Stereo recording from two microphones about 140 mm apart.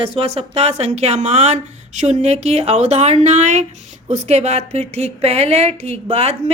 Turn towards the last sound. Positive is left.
turn(degrees=-45)  # may be behind; listen again after turning